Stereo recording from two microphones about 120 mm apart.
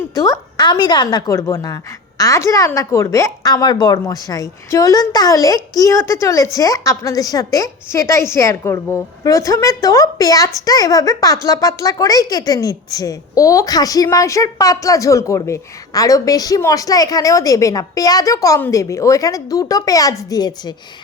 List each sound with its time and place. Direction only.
0.1 s a woman's voice: 30° left (ahead or behind)